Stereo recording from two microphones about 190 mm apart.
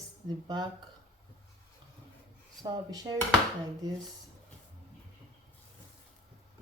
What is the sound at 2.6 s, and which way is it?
A woman's voice, 20° right (ahead or behind).